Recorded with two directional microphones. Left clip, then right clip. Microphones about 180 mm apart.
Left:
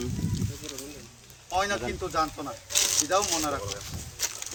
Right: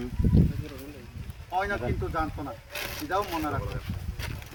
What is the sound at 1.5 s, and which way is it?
Speech, 15° left (ahead or behind).